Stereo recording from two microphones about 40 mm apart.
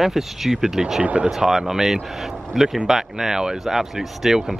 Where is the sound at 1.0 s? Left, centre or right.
Right.